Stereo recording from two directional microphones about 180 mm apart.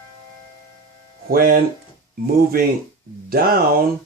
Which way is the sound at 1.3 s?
55° right (ahead or behind).